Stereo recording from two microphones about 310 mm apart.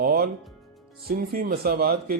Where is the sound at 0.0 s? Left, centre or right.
Right.